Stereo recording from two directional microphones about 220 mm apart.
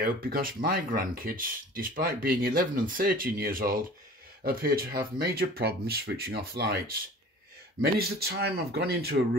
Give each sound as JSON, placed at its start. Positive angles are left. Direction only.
{"t": 0.0, "sound": "speech", "side_deg": -40}